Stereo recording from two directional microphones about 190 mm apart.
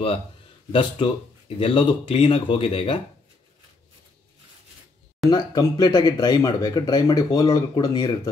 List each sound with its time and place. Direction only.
0.7 s speech: 25° left (ahead or behind)
5.3 s speech: 20° left (ahead or behind)